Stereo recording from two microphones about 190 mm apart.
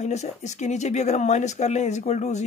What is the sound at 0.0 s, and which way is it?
Speech, 35° left (ahead or behind).